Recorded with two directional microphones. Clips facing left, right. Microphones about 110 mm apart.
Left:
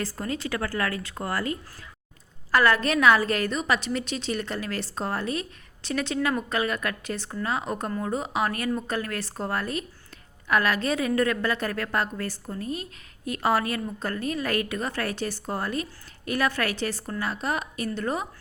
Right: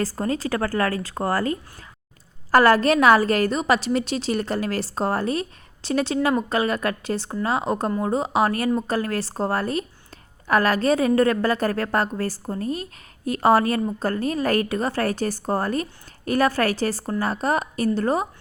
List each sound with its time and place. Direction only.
0.0 s a woman's voice: 35° right (ahead or behind)